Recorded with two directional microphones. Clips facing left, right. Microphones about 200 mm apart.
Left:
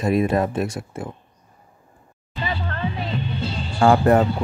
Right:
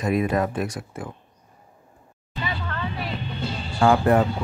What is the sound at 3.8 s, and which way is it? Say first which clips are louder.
Speech: left 3 dB; 40° left (ahead or behind).